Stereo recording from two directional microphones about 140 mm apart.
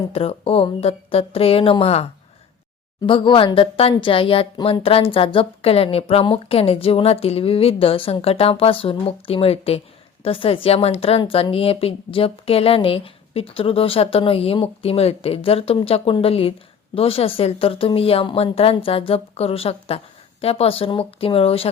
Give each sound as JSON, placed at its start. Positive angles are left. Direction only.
{"t": 0.1, "sound": "a woman's voice", "side_deg": 45}
{"t": 11.2, "sound": "a woman's voice", "side_deg": 35}